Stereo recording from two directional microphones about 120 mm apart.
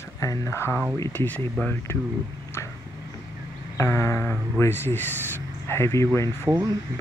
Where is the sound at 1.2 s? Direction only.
15° left (ahead or behind).